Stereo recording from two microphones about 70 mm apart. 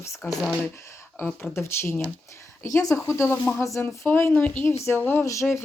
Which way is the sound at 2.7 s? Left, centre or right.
Left.